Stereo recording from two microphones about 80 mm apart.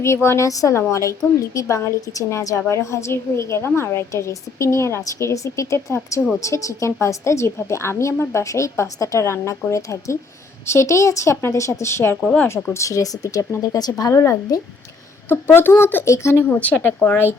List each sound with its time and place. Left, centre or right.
0.0 s a woman's voice: left
12.2 s speech: centre
12.7 s a woman's voice: left
13.6 s speech: left
14.0 s a woman's voice: left
15.3 s speech: left